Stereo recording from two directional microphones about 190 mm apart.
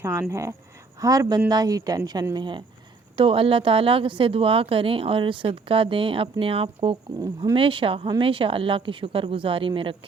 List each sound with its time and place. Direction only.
0.0 s a woman's voice: 15° right (ahead or behind)